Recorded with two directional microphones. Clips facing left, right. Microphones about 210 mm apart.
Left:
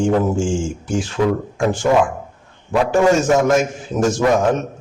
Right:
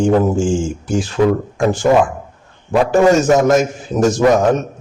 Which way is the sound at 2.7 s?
40° right (ahead or behind).